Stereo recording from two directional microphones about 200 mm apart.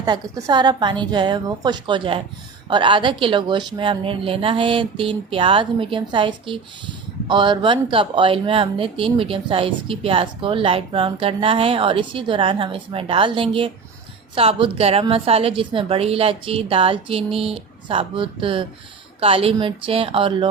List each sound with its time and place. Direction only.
0.0 s speech: 20° right (ahead or behind)